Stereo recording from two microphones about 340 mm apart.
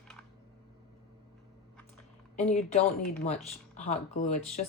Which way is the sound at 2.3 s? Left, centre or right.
Centre.